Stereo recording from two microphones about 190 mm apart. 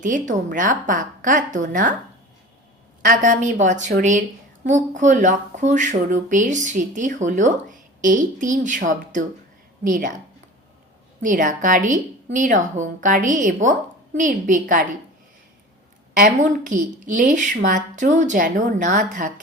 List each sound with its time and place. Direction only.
0.0 s a woman's voice: 40° right (ahead or behind)
3.1 s a woman's voice: 40° right (ahead or behind)
11.2 s a woman's voice: 45° right (ahead or behind)
16.2 s speech: 40° right (ahead or behind)